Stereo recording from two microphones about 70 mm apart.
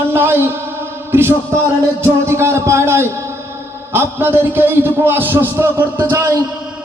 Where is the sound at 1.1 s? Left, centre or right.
Right.